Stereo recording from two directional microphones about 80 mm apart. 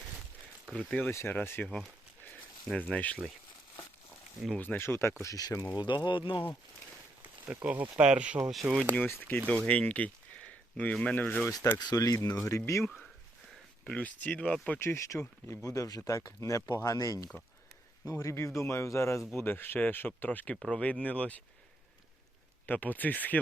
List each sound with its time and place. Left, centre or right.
0.8 s speech: centre
1.1 s speech: left
1.6 s speech: centre
4.5 s speech: left
5.2 s speech: left
7.5 s speech: centre
9.0 s speech: left
11.8 s speech: left
12.5 s speech: left
13.8 s speech: centre
14.8 s speech: left
19.3 s speech: left
22.6 s speech: left